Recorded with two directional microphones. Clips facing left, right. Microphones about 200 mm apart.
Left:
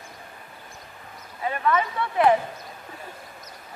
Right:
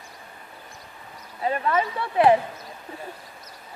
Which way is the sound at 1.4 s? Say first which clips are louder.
Right 1 dB; 35° right (ahead or behind).